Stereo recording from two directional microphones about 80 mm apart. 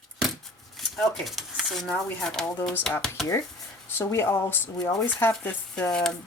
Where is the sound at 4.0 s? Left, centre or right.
Left.